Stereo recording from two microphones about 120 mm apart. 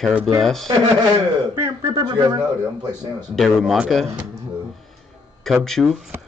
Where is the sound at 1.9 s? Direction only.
35° right (ahead or behind).